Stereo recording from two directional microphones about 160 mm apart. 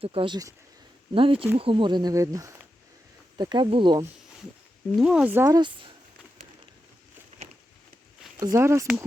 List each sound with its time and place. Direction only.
0.0 s speech: 35° right (ahead or behind)
4.9 s speech: 5° right (ahead or behind)
5.5 s speech: 30° right (ahead or behind)
8.4 s speech: 20° right (ahead or behind)